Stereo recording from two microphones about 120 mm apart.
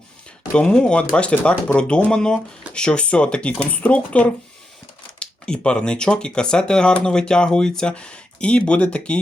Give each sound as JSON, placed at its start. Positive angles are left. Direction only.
{"t": 0.5, "sound": "speech", "side_deg": 10}